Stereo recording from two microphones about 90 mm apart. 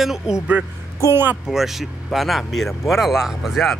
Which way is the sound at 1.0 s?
25° right (ahead or behind).